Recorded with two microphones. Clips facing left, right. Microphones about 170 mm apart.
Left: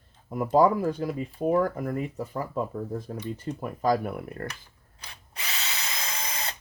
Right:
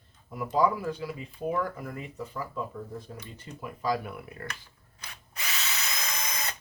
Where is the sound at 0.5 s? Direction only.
45° left (ahead or behind).